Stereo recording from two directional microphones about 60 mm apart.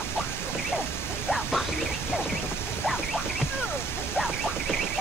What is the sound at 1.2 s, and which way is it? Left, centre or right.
Music, centre.